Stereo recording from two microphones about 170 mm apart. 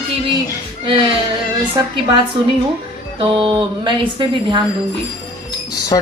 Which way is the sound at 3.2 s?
30° right (ahead or behind).